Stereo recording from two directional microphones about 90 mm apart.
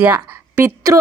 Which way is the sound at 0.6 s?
35° right (ahead or behind).